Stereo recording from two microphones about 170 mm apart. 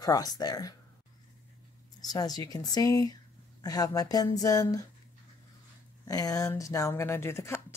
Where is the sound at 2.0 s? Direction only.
25° left (ahead or behind).